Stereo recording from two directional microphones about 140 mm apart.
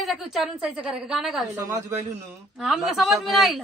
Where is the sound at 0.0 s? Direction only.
Centre (ahead or behind).